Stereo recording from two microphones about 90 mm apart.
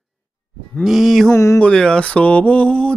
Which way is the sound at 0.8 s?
Centre (ahead or behind).